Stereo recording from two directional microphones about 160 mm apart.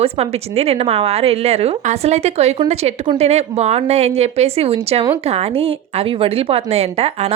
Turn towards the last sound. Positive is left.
turn(degrees=-40)  # may be behind; listen again after turning